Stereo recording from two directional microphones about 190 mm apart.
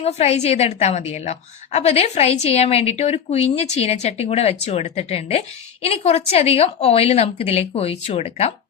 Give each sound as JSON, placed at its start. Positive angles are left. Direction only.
{"t": 0.0, "sound": "a woman's voice", "side_deg": 35}